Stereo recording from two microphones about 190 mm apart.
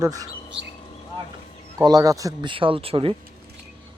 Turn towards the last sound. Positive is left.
turn(degrees=-30)  # may be behind; listen again after turning